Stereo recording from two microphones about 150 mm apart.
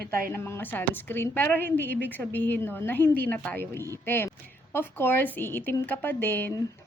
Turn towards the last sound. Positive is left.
turn(degrees=15)  # may be behind; listen again after turning